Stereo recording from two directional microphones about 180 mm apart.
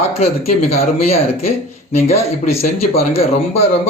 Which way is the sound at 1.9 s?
35° left (ahead or behind).